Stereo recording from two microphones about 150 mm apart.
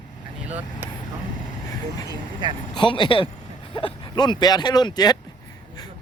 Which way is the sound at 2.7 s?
30° left (ahead or behind).